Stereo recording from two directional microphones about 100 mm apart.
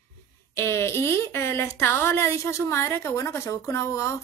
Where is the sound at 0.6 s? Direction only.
25° left (ahead or behind).